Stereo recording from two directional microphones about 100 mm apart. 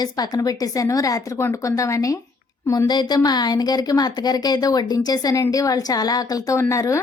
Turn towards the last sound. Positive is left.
turn(degrees=30)  # may be behind; listen again after turning